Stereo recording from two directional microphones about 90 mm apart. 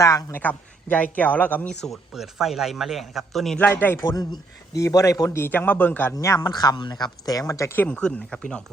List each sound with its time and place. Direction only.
0.0 s a man's voice: 40° left (ahead or behind)
0.3 s speech: 15° left (ahead or behind)
1.8 s speech: centre (ahead or behind)
3.6 s a man's voice: 20° left (ahead or behind)
4.1 s a man's voice: 45° left (ahead or behind)
5.4 s a man's voice: 20° left (ahead or behind)
6.1 s speech: 45° left (ahead or behind)
7.8 s speech: 15° left (ahead or behind)